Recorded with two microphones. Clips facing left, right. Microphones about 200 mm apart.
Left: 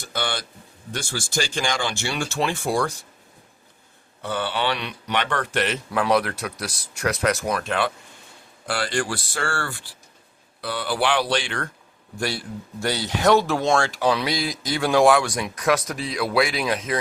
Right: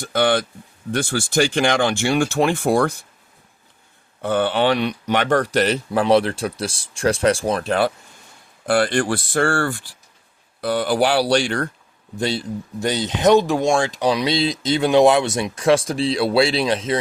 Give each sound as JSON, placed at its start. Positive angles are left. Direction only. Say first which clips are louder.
{"t": 0.0, "sound": "speech", "louder": "right 10 dB", "side_deg": -55}
{"t": 4.2, "sound": "speech", "louder": "right 7 dB", "side_deg": -50}
{"t": 8.6, "sound": "speech", "louder": "right 7 dB", "side_deg": -55}
{"t": 12.1, "sound": "speech", "louder": "right 5 dB", "side_deg": -20}